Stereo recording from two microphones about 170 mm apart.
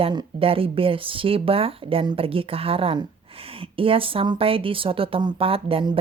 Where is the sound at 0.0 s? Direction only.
30° right (ahead or behind).